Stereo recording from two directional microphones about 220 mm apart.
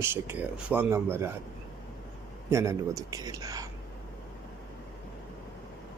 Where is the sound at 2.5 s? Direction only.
15° right (ahead or behind).